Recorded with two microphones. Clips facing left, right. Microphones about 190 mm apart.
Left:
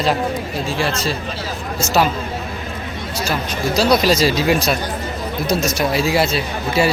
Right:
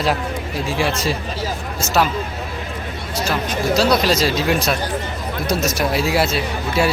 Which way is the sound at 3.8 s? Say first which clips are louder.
Left 3 dB; 5° left (ahead or behind).